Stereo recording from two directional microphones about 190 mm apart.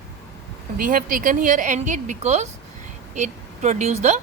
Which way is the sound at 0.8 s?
45° right (ahead or behind).